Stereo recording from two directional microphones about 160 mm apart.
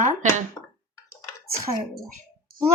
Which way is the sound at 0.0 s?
50° right (ahead or behind).